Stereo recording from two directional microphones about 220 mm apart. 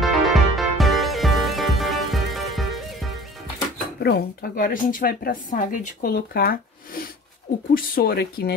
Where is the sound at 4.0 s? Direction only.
45° left (ahead or behind).